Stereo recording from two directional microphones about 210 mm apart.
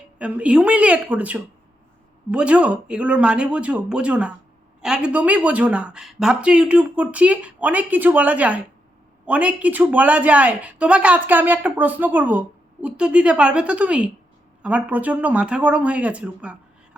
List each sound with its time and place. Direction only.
0.2 s speech: 5° right (ahead or behind)